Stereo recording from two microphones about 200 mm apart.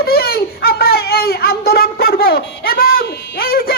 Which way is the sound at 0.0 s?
50° left (ahead or behind).